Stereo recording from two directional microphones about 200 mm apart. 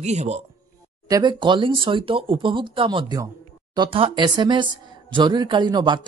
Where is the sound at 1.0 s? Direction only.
20° right (ahead or behind).